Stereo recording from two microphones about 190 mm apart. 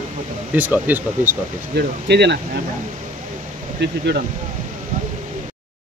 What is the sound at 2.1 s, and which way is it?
Speech, 65° right (ahead or behind).